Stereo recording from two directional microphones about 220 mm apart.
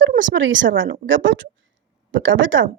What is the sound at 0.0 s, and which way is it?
A woman's voice, 55° right (ahead or behind).